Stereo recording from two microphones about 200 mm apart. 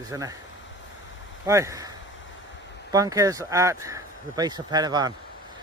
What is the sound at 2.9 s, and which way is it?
Speech, 15° right (ahead or behind).